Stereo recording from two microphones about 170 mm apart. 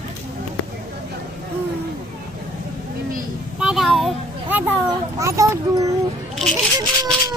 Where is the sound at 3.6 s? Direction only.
Centre (ahead or behind).